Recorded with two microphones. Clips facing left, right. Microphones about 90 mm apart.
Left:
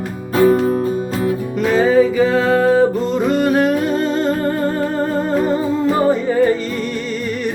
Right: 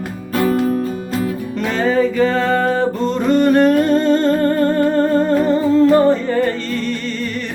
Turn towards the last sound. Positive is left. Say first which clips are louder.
# left 1 dB
turn(degrees=10)  # may be behind; listen again after turning